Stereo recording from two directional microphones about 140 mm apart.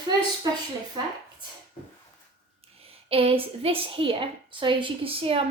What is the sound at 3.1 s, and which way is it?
A woman's voice, 40° right (ahead or behind).